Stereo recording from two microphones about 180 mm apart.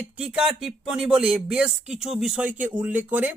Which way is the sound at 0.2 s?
5° right (ahead or behind).